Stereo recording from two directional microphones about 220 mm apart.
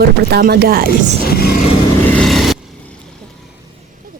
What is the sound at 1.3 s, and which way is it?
Vehicle, 45° left (ahead or behind).